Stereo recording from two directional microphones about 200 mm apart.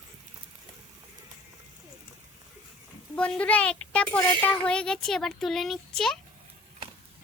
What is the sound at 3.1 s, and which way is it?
Speech, 5° left (ahead or behind).